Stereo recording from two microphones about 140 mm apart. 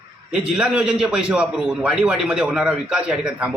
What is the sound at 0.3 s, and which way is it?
A man's voice, 5° right (ahead or behind).